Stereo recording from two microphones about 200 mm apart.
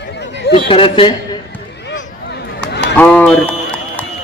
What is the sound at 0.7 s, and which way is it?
Speech, 25° left (ahead or behind).